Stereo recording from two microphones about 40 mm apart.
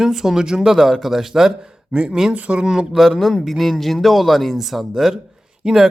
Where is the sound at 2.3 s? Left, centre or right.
Right.